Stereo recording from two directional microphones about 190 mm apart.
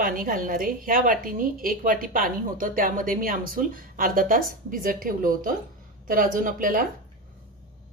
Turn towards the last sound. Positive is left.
turn(degrees=-45)  # may be behind; listen again after turning